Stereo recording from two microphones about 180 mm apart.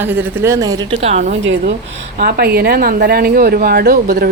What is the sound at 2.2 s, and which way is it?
A woman's voice, 60° right (ahead or behind).